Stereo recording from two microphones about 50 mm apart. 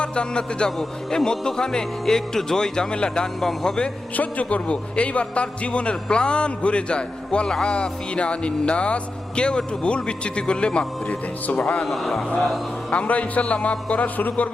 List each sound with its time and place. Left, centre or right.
0.0 s a man's voice: centre
4.2 s a man's voice: left
11.9 s speech: centre
12.9 s a man's voice: left